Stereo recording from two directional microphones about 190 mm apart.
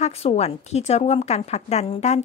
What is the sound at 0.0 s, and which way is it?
A woman's voice, 35° left (ahead or behind).